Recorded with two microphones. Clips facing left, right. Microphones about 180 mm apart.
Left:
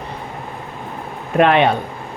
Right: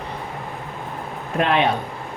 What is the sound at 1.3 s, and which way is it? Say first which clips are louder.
Speech: left 6 dB; 65° left (ahead or behind).